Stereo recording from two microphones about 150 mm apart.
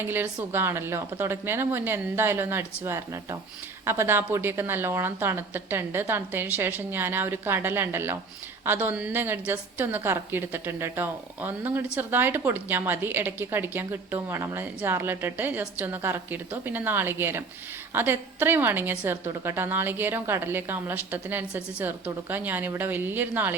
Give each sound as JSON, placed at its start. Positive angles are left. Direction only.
{"t": 0.0, "sound": "a woman's voice", "side_deg": -15}